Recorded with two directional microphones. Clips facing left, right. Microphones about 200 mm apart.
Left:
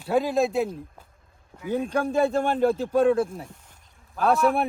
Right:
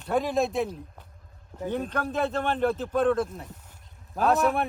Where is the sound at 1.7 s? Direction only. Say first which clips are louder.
Left 6 dB; 10° left (ahead or behind).